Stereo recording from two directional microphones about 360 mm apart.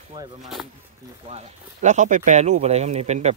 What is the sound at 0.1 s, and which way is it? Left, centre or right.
Speech, centre.